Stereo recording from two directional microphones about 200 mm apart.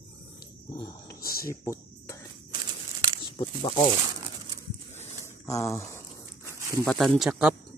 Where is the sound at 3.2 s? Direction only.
20° left (ahead or behind).